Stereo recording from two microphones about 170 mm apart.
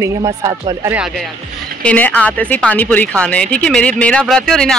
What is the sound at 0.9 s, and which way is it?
Speech, 5° right (ahead or behind).